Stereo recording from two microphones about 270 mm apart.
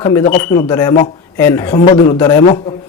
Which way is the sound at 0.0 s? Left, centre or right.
Centre.